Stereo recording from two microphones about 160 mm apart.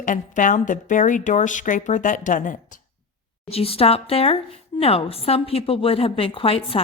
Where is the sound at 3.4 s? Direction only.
35° left (ahead or behind).